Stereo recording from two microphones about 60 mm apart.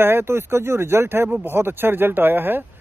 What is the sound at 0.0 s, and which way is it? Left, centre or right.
Speech, right.